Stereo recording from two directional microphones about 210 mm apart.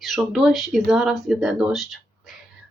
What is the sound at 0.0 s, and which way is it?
Speech, centre (ahead or behind).